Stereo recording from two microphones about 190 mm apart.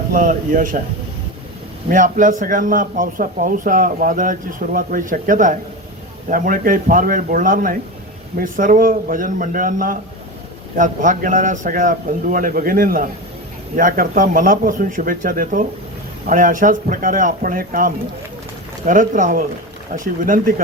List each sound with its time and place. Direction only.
0.1 s a man's voice: 45° right (ahead or behind)
1.9 s a man's voice: 45° right (ahead or behind)